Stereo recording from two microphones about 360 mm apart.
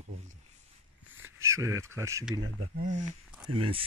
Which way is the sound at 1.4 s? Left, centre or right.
Centre.